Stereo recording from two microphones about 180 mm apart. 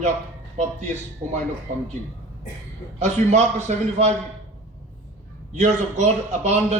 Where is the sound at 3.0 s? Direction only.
40° right (ahead or behind).